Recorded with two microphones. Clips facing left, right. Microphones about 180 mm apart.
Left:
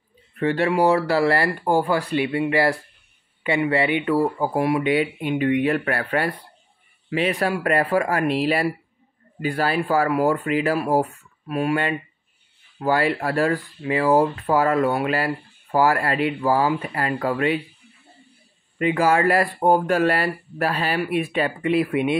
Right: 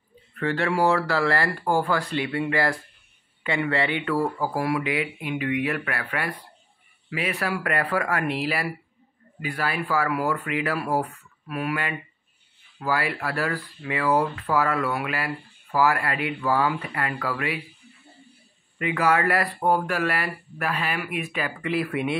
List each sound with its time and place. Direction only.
0.4 s speech: 20° left (ahead or behind)
18.8 s speech: 25° left (ahead or behind)